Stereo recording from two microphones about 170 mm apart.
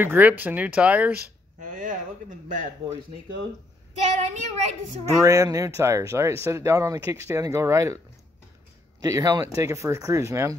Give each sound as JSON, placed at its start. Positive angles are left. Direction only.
{"t": 0.0, "sound": "speech", "side_deg": -10}
{"t": 1.8, "sound": "speech", "side_deg": -50}
{"t": 4.2, "sound": "speech", "side_deg": -45}
{"t": 5.2, "sound": "speech", "side_deg": -20}
{"t": 9.0, "sound": "speech", "side_deg": -20}